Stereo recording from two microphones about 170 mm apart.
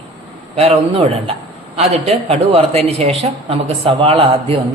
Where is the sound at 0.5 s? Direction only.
35° right (ahead or behind).